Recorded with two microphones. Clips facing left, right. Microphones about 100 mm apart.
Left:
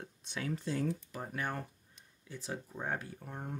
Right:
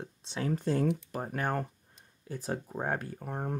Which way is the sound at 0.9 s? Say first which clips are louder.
Right 6 dB; 70° right (ahead or behind).